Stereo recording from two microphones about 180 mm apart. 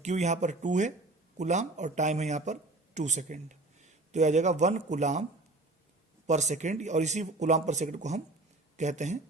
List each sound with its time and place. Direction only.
0.0 s speech: 40° right (ahead or behind)
6.2 s speech: 40° right (ahead or behind)